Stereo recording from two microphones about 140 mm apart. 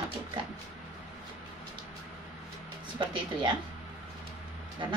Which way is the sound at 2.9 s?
35° right (ahead or behind).